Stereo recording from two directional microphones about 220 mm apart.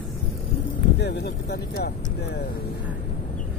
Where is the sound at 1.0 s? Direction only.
50° left (ahead or behind).